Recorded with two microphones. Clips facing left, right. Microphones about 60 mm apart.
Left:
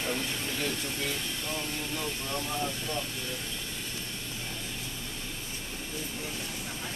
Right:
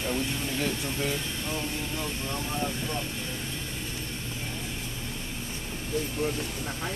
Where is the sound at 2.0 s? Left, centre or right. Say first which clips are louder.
Right 1 dB; centre.